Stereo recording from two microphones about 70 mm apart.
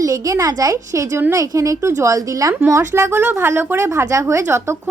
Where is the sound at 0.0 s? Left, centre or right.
Right.